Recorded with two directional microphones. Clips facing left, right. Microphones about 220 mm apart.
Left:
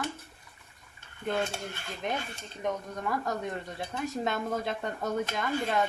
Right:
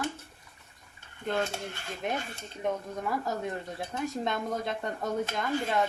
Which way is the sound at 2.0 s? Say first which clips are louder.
Even; 5° right (ahead or behind).